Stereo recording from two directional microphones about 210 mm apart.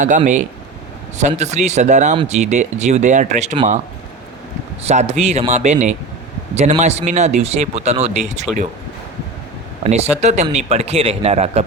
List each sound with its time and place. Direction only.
0.0 s speech: 35° right (ahead or behind)
4.8 s speech: 30° right (ahead or behind)
8.5 s speech: centre (ahead or behind)
9.8 s speech: 30° right (ahead or behind)